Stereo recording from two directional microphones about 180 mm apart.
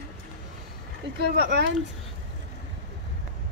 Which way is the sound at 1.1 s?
65° right (ahead or behind).